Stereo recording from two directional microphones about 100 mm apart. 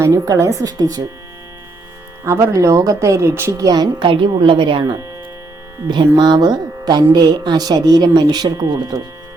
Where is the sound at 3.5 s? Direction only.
40° right (ahead or behind).